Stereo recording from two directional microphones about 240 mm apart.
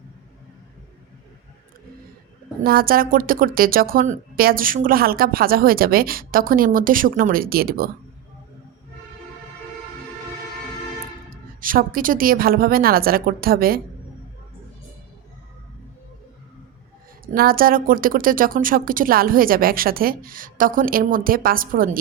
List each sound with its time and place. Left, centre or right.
2.6 s a woman's voice: right
11.6 s a woman's voice: right
17.3 s a woman's voice: right